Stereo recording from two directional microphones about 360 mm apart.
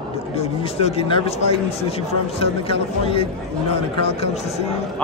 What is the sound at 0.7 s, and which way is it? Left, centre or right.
Speech, centre.